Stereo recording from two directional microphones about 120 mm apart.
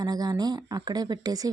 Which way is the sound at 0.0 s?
35° right (ahead or behind).